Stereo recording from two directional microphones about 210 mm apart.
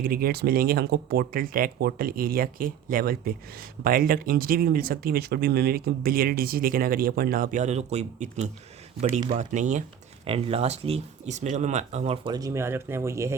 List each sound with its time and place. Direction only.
0.0 s speech: 45° right (ahead or behind); by 13.3 s 15° right (ahead or behind)